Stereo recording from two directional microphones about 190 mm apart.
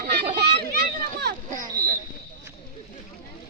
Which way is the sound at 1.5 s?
45° right (ahead or behind).